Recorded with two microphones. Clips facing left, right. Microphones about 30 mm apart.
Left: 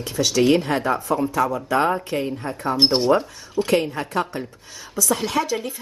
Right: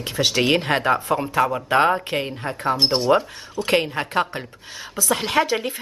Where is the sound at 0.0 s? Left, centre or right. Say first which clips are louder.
Left 1 dB; right.